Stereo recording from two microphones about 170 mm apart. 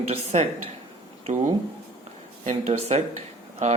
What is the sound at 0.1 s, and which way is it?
Speech, 40° right (ahead or behind).